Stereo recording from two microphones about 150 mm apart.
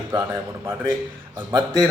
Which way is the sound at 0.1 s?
25° right (ahead or behind).